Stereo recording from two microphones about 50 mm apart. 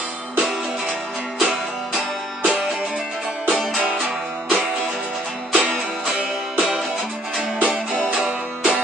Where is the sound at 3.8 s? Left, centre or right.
Right.